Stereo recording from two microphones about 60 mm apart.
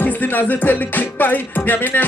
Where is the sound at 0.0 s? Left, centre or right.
Left.